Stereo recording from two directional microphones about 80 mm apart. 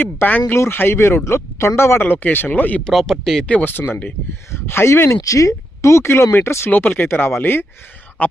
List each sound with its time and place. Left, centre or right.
0.0 s speech: left
2.8 s speech: centre
3.4 s speech: left
6.7 s speech: left